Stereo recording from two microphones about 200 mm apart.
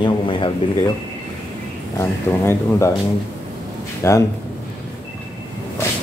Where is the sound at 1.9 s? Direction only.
15° left (ahead or behind).